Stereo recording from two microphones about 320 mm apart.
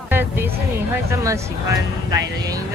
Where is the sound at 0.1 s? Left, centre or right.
Centre.